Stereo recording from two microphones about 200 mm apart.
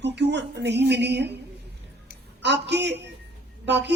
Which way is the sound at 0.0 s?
60° right (ahead or behind).